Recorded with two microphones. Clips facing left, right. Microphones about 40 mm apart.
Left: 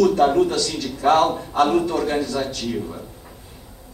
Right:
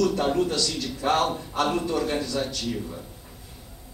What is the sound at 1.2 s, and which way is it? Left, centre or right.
Speech, centre.